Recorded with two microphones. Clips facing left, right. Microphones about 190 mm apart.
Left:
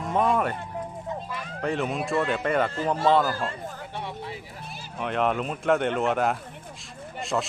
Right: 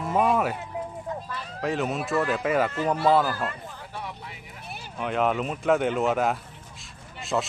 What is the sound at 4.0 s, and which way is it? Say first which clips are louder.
Vehicle: left 3 dB; 30° left (ahead or behind).